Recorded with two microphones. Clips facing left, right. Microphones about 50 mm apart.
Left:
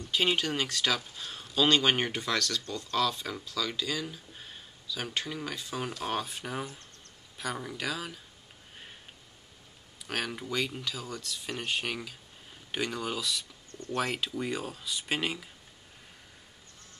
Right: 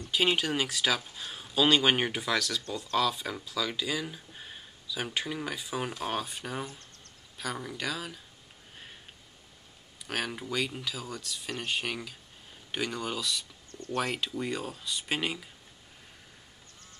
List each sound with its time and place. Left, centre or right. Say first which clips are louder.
0.1 s speech: right 1 dB; centre
10.0 s speech: even; centre
13.7 s a sound: left 1 dB; left
13.9 s speech: even; centre